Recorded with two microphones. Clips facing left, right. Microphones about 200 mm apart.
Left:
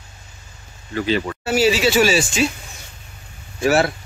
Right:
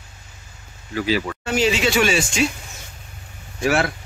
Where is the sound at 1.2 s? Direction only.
5° left (ahead or behind).